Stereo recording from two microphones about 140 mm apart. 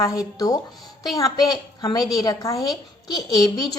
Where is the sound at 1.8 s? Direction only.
30° left (ahead or behind).